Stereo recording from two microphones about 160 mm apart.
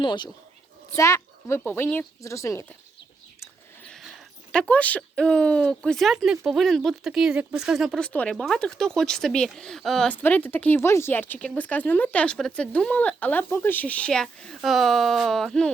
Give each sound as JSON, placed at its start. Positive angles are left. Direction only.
{"t": 0.0, "sound": "speech", "side_deg": 30}
{"t": 3.8, "sound": "mechanisms", "side_deg": 0}
{"t": 4.5, "sound": "speech", "side_deg": 10}